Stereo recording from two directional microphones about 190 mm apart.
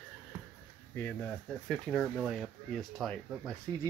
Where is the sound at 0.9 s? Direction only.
10° left (ahead or behind).